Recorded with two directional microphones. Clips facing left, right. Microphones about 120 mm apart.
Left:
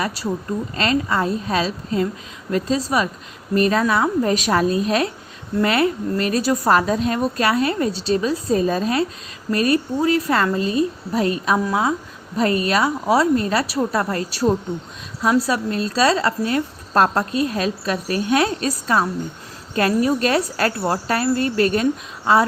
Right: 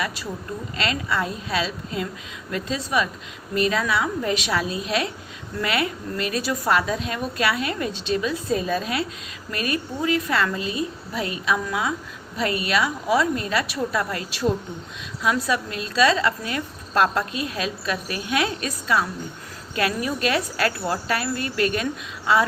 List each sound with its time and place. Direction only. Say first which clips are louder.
0.0 s a woman's voice: left 5 dB; 35° left (ahead or behind)